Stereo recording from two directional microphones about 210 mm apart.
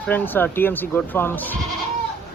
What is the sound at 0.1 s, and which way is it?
Speech, 10° left (ahead or behind).